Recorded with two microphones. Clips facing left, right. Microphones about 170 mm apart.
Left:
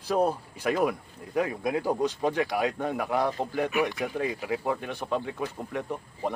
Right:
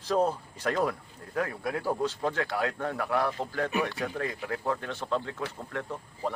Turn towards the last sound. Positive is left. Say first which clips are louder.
# left 2 dB
turn(degrees=15)  # may be behind; listen again after turning